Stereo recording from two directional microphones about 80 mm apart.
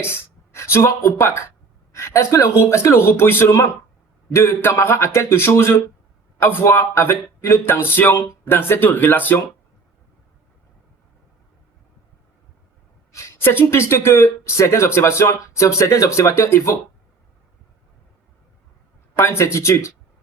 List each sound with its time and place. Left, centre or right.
0.0 s speech: left
13.1 s speech: left
19.1 s speech: left